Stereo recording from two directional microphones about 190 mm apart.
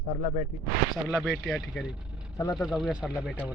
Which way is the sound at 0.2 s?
40° left (ahead or behind).